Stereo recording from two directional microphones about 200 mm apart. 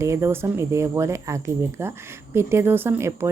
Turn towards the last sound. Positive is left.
turn(degrees=-15)  # may be behind; listen again after turning